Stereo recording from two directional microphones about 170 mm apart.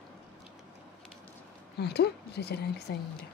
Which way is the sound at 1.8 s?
75° left (ahead or behind).